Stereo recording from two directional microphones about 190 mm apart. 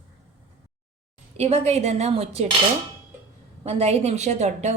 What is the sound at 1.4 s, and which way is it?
A woman's voice, 35° right (ahead or behind).